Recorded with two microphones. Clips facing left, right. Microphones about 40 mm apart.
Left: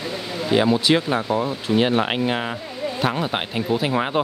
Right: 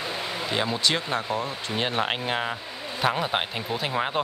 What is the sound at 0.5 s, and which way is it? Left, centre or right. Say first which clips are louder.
Speech: left 9 dB; centre.